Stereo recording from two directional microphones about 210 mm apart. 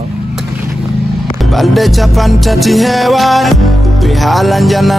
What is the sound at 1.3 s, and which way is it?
Music, centre (ahead or behind).